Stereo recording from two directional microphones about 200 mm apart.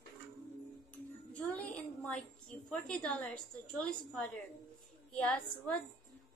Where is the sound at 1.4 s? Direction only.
5° left (ahead or behind).